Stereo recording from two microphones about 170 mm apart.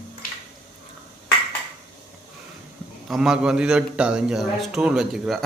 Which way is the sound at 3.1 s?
5° right (ahead or behind).